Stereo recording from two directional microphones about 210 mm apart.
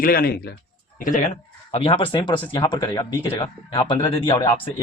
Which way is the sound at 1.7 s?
25° left (ahead or behind).